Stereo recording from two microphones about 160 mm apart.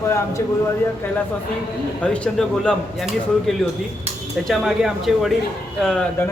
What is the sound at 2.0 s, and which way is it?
Speech, 5° left (ahead or behind).